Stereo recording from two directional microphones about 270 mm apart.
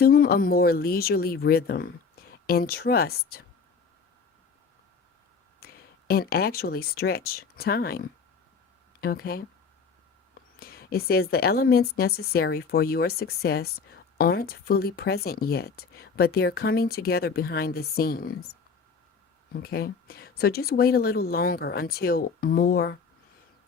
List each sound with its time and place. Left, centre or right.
0.0 s a woman's voice: left
5.5 s speech: left
10.6 s a woman's voice: left
19.5 s a woman's voice: left